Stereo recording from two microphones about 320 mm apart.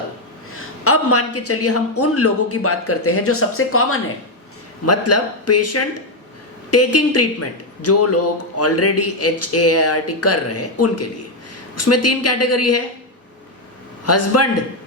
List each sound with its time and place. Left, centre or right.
0.9 s speech: left
14.0 s a man's voice: left